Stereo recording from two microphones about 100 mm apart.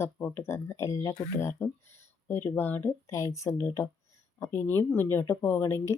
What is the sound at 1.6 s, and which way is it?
Speech, 20° left (ahead or behind).